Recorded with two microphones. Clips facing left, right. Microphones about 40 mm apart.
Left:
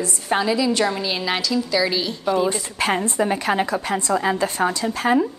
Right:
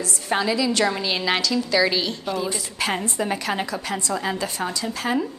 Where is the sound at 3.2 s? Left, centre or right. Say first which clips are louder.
Left 4 dB; centre.